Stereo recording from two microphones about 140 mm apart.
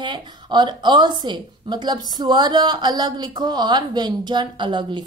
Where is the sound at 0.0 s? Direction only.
35° right (ahead or behind).